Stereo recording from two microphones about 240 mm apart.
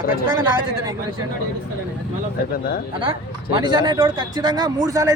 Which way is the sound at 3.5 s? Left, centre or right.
Centre.